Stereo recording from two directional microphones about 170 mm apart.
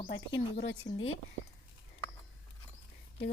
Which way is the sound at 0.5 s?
75° left (ahead or behind).